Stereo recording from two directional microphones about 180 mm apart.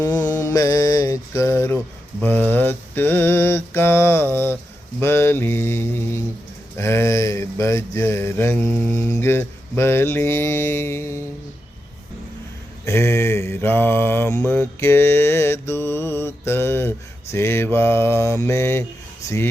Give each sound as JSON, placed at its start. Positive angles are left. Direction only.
{"t": 0.0, "sound": "mantra", "side_deg": 20}
{"t": 0.3, "sound": "music", "side_deg": 15}
{"t": 2.2, "sound": "mantra", "side_deg": 10}
{"t": 6.7, "sound": "a sound", "side_deg": 15}
{"t": 12.8, "sound": "mantra", "side_deg": 15}